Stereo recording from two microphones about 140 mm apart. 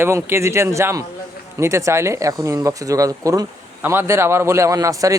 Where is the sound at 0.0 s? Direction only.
20° right (ahead or behind).